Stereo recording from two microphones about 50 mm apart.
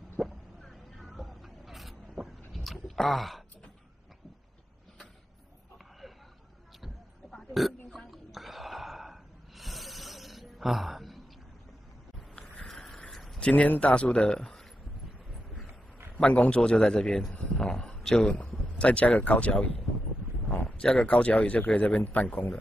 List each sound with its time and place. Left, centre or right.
0.2 s a sound: centre
0.7 s vehicle: centre
3.0 s speech: centre
7.5 s burping: centre
8.1 s gasp: centre
12.6 s a sound: centre
13.4 s a man's voice: left
16.2 s a man's voice: left
17.6 s a sound: centre
18.8 s a man's voice: left